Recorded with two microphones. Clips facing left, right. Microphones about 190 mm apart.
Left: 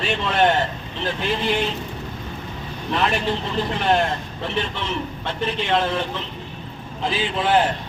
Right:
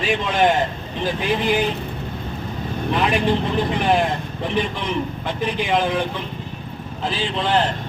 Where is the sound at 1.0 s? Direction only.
15° right (ahead or behind).